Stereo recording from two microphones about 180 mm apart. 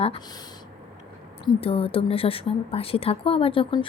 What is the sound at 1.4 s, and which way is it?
Speech, 30° left (ahead or behind).